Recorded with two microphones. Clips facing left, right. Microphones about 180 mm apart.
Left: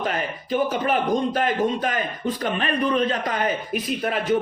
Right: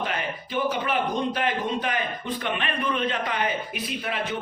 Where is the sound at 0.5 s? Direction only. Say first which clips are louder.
Left 4 dB; 45° left (ahead or behind).